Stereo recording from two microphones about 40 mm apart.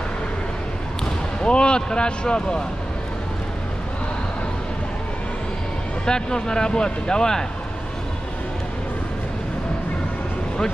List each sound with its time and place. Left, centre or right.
1.4 s speech: left
6.0 s speech: centre